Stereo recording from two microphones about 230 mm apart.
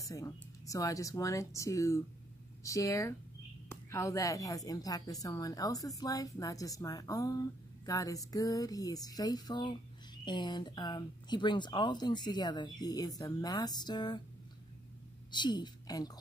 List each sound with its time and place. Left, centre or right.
0.0 s a woman's voice: centre
15.3 s a woman's voice: centre